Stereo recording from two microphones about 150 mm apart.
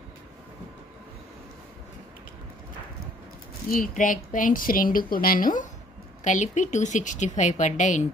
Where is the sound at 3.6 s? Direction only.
65° left (ahead or behind).